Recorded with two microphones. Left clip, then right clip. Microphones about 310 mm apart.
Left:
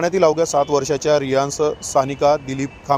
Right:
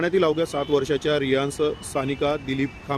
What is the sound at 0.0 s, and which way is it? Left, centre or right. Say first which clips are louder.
A man's voice: left 5 dB; centre.